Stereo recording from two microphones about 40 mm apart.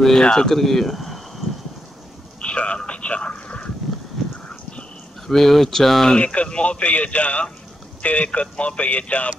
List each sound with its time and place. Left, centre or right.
0.2 s speech: centre
0.6 s speech: centre
2.4 s telephone: left
2.9 s a sound: left
5.2 s speech: centre
6.1 s a man's voice: left
6.8 s a man's voice: left